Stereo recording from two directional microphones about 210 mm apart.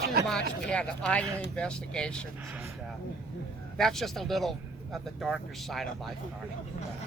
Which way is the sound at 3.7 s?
Centre (ahead or behind).